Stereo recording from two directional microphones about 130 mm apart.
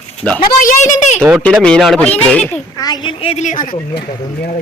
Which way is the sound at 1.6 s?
5° left (ahead or behind).